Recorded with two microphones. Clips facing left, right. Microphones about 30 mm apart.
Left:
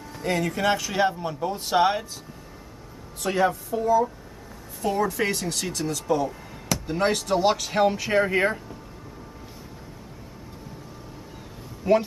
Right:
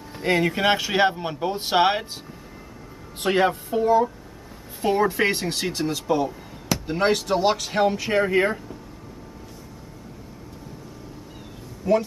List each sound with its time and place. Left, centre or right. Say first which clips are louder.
0.1 s speech: right 4 dB; right
3.2 s speech: right 2 dB; right; by 8.7 s centre
11.9 s speech: even; centre